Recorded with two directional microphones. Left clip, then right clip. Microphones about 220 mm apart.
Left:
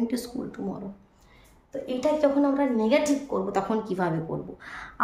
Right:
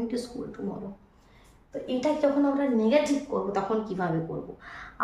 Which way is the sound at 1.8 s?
40° left (ahead or behind).